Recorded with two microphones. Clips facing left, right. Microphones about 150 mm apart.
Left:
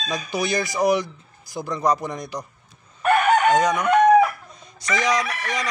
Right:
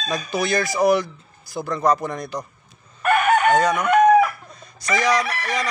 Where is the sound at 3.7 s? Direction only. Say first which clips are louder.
Even; 5° right (ahead or behind).